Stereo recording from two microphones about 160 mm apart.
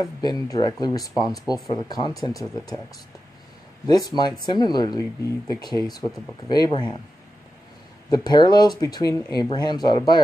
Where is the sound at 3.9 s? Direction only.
25° left (ahead or behind).